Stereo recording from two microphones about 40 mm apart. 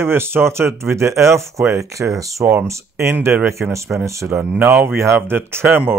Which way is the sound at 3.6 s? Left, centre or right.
Right.